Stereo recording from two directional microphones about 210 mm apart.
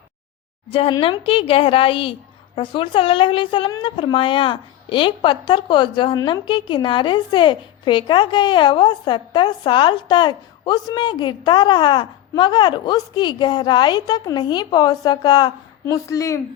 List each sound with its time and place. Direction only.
0.7 s a woman's voice: 25° left (ahead or behind)